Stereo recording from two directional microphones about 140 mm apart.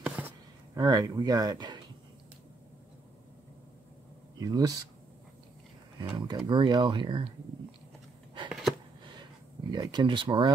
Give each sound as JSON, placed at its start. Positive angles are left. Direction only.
{"t": 0.0, "sound": "a sound", "side_deg": -10}
{"t": 0.7, "sound": "speech", "side_deg": -25}
{"t": 4.4, "sound": "speech", "side_deg": -25}
{"t": 5.9, "sound": "speech", "side_deg": -30}
{"t": 9.2, "sound": "speech", "side_deg": -30}